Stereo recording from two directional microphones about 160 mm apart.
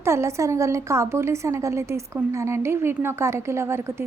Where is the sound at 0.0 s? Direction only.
15° right (ahead or behind).